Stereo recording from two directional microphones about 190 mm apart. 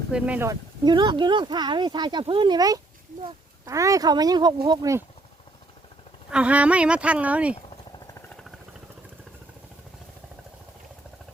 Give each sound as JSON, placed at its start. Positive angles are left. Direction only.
{"t": 0.1, "sound": "speech", "side_deg": -10}
{"t": 0.9, "sound": "speech", "side_deg": -25}
{"t": 6.3, "sound": "speech", "side_deg": -5}
{"t": 7.9, "sound": "a sound", "side_deg": 15}